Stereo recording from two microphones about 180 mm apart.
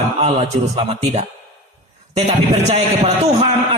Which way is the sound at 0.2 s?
35° right (ahead or behind).